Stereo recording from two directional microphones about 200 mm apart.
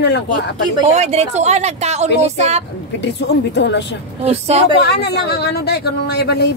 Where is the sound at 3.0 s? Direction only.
60° left (ahead or behind).